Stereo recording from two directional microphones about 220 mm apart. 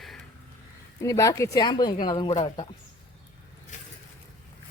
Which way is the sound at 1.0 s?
15° left (ahead or behind).